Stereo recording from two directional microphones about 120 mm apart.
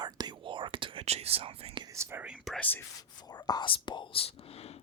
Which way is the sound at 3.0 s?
35° left (ahead or behind).